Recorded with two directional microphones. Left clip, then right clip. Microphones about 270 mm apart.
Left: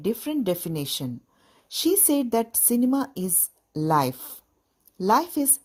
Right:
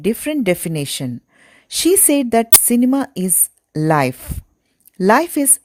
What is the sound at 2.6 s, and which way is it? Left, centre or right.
Speech, right.